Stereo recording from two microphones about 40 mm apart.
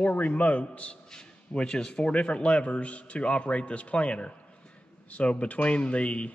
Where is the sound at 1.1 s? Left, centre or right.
Centre.